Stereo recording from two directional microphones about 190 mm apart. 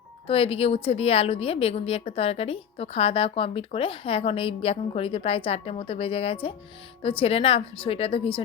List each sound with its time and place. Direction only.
0.3 s a woman's voice: 30° left (ahead or behind)